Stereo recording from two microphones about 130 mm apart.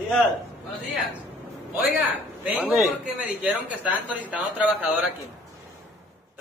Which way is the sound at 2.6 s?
Centre (ahead or behind).